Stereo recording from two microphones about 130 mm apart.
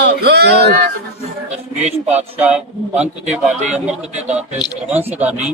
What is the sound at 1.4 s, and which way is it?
Speech, 60° right (ahead or behind).